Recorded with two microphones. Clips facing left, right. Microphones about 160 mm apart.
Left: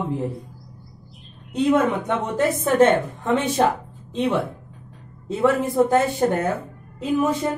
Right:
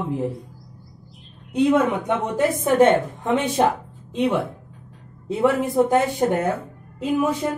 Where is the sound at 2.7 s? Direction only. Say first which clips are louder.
Even; 15° right (ahead or behind).